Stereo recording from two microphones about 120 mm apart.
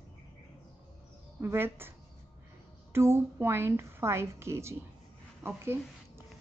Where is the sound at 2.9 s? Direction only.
20° right (ahead or behind).